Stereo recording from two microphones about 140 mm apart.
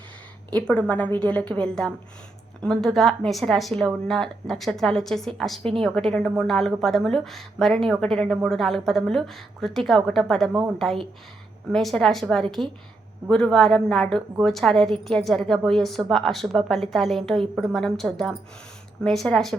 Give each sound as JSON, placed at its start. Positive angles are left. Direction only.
{"t": 0.5, "sound": "a woman's voice", "side_deg": 10}